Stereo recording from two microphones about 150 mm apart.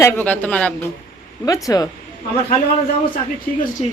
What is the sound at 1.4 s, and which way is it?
Speech, 25° left (ahead or behind).